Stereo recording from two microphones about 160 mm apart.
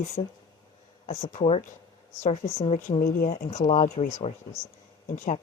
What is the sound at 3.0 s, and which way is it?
Speech, 65° left (ahead or behind).